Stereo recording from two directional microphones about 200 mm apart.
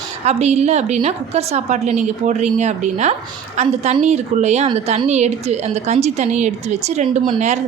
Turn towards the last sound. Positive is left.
turn(degrees=-35)  # may be behind; listen again after turning